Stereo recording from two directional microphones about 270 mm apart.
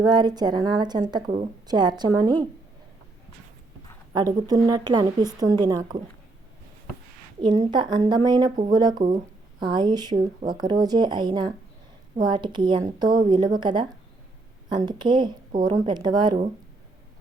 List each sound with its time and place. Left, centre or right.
0.0 s speech: centre
4.1 s speech: centre
7.4 s speech: right